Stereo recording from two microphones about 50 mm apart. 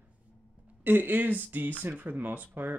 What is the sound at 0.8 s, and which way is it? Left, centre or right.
Speech, right.